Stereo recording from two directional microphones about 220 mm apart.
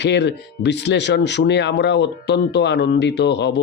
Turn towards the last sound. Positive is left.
turn(degrees=50)  # may be behind; listen again after turning